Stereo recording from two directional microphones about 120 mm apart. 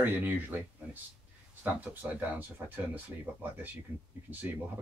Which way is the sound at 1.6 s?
15° right (ahead or behind).